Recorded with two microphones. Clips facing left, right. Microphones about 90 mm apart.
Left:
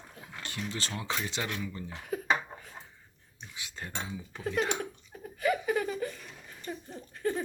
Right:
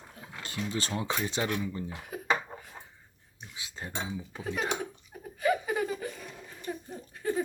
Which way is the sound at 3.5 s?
25° right (ahead or behind).